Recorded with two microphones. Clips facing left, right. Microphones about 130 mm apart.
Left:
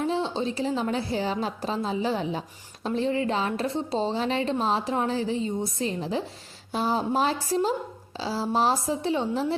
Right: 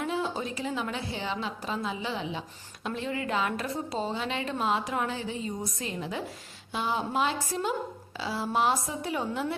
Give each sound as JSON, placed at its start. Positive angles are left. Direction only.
{"t": 0.0, "sound": "a woman's voice", "side_deg": 30}